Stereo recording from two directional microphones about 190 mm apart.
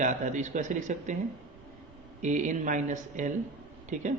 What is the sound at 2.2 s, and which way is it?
Speech, 40° right (ahead or behind).